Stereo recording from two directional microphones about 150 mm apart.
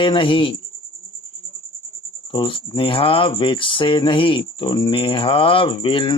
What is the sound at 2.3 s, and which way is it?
Speech, 35° left (ahead or behind).